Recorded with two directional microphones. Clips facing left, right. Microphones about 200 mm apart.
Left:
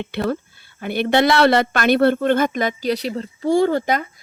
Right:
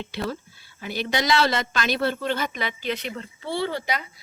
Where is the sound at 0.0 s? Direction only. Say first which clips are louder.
Left 7 dB; 60° left (ahead or behind).